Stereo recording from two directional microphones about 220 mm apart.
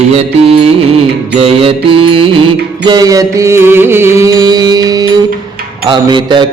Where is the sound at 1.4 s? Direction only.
25° right (ahead or behind).